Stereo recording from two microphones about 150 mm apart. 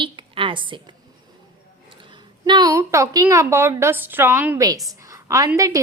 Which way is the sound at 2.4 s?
30° right (ahead or behind).